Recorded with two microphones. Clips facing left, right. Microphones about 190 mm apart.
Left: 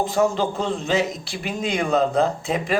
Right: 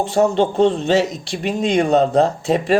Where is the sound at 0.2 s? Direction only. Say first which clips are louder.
Right 8 dB; 30° right (ahead or behind).